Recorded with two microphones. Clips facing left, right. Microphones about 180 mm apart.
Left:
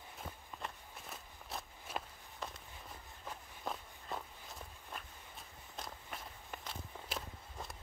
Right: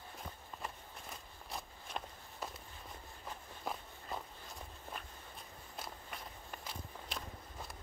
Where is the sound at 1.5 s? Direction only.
5° left (ahead or behind).